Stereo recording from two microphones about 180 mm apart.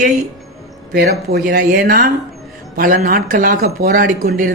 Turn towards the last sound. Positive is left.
turn(degrees=-50)  # may be behind; listen again after turning